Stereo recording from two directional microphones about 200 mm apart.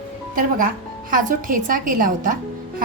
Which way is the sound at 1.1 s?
45° right (ahead or behind).